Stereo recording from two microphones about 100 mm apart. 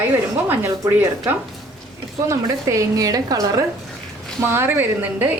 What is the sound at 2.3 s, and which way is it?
A woman's voice, 30° right (ahead or behind).